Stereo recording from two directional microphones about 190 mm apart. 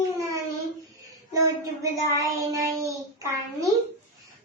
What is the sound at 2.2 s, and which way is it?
Speech, 15° right (ahead or behind).